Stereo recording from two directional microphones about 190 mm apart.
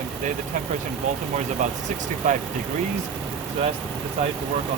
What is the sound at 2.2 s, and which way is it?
Speech, 40° right (ahead or behind).